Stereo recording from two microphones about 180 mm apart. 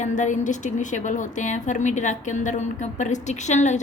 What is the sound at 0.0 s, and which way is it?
A woman's voice, 45° left (ahead or behind).